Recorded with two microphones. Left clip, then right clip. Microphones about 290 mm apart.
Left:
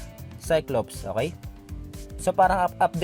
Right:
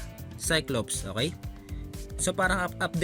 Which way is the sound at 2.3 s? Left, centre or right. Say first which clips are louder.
Left 7 dB; left.